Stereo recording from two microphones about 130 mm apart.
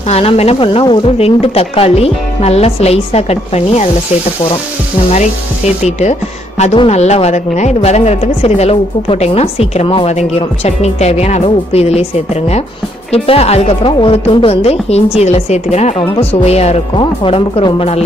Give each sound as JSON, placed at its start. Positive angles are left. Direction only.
{"t": 0.1, "sound": "speech", "side_deg": 50}
{"t": 5.9, "sound": "speech", "side_deg": 60}
{"t": 16.9, "sound": "speech", "side_deg": 40}